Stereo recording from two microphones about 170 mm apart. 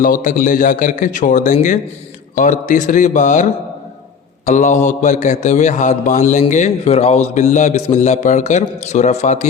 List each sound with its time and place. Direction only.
0.0 s a man's voice: 55° left (ahead or behind)
4.4 s a man's voice: 45° left (ahead or behind)